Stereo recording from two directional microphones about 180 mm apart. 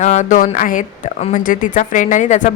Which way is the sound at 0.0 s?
40° left (ahead or behind).